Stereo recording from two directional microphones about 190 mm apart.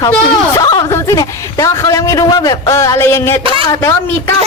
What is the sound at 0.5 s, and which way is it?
Speech, 20° left (ahead or behind).